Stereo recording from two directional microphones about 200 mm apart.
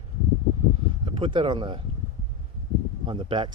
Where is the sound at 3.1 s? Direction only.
25° right (ahead or behind).